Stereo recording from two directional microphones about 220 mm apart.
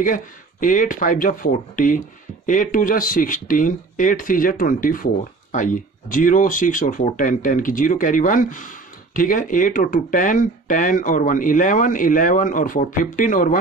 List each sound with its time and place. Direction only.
0.0 s speech: 35° left (ahead or behind)